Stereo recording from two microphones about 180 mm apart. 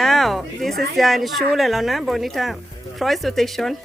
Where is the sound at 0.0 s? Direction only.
Centre (ahead or behind).